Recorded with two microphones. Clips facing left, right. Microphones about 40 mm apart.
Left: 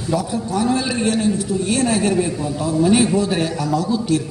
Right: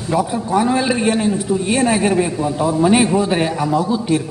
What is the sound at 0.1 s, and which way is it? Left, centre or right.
A man's voice, right.